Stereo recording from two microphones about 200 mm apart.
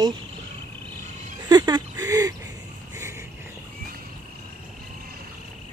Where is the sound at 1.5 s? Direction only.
20° right (ahead or behind).